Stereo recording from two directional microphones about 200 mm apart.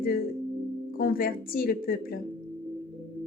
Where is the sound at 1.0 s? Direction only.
45° left (ahead or behind).